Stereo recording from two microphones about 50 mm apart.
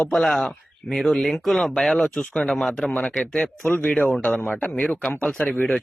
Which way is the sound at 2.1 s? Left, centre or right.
Centre.